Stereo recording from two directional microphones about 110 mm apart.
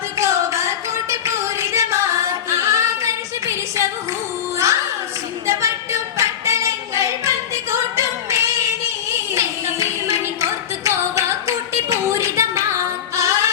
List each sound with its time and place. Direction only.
0.2 s singing: 25° right (ahead or behind)
4.5 s music: 30° right (ahead or behind)
5.5 s singing: 25° right (ahead or behind)
9.1 s music: 25° right (ahead or behind)
10.8 s singing: 25° right (ahead or behind)
13.1 s music: 25° right (ahead or behind)